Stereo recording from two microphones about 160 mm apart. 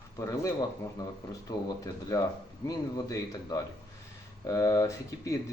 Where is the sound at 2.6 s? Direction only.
25° left (ahead or behind).